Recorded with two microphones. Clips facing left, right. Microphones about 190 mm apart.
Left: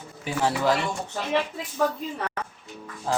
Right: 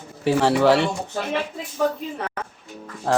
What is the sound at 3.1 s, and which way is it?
Speech, 70° right (ahead or behind).